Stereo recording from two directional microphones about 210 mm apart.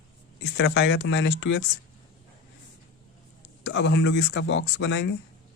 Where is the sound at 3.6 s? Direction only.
55° left (ahead or behind).